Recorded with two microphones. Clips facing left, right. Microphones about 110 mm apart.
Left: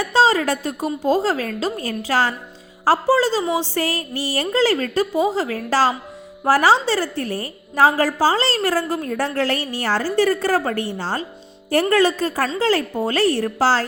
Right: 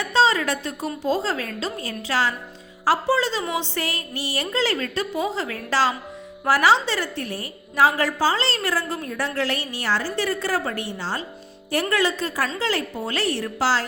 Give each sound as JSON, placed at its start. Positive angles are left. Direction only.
{"t": 0.0, "sound": "a woman's voice", "side_deg": 40}